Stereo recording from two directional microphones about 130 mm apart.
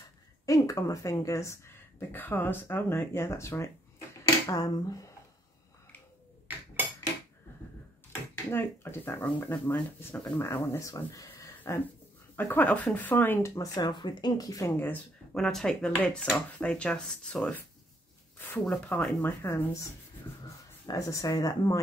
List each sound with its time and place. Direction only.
0.5 s speech: 25° left (ahead or behind)
8.1 s speech: 15° left (ahead or behind)
15.3 s speech: centre (ahead or behind); by 21.7 s 25° left (ahead or behind)